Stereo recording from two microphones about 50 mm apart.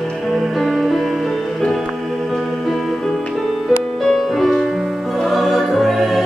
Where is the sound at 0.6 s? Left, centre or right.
Centre.